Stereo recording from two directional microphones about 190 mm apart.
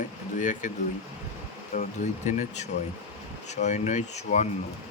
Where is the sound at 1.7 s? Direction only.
40° left (ahead or behind).